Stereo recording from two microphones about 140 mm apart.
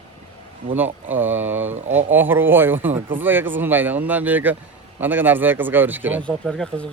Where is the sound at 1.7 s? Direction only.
55° right (ahead or behind).